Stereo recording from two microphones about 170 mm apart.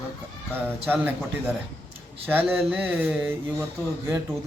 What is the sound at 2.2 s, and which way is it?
A man's voice, 10° right (ahead or behind).